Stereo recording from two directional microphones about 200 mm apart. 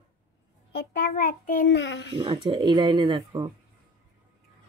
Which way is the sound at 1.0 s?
45° left (ahead or behind).